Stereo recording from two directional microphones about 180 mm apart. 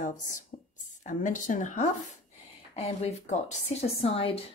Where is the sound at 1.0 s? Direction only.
45° left (ahead or behind).